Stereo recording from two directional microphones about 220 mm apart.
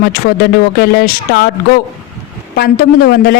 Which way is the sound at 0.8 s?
45° left (ahead or behind).